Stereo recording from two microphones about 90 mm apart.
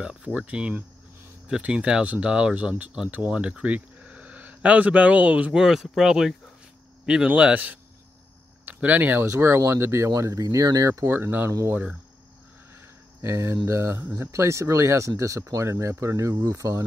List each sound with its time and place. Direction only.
0.0 s speech: 15° right (ahead or behind)
7.2 s speech: 15° right (ahead or behind)
9.2 s speech: 30° right (ahead or behind)
11.1 s speech: 25° right (ahead or behind)
13.2 s speech: 30° right (ahead or behind)